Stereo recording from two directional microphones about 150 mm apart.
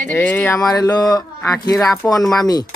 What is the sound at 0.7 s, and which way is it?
Speech, 25° left (ahead or behind).